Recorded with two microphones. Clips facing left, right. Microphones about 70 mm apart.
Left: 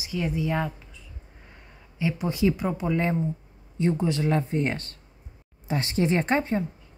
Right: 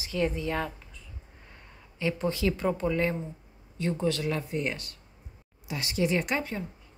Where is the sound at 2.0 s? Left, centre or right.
Centre; by 6.6 s left.